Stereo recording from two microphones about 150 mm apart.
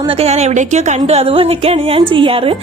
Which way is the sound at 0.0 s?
40° right (ahead or behind).